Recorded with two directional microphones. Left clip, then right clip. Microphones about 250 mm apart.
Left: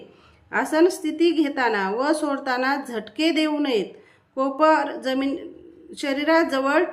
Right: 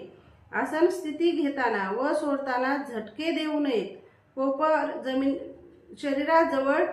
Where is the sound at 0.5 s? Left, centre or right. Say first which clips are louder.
Left 5 dB; left.